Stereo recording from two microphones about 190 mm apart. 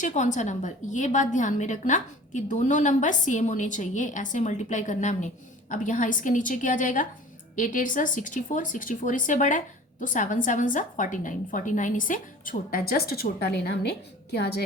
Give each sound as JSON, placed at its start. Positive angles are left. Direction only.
{"t": 0.0, "sound": "a woman's voice", "side_deg": 40}